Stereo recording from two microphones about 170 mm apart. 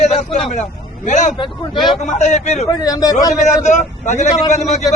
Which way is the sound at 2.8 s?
20° left (ahead or behind).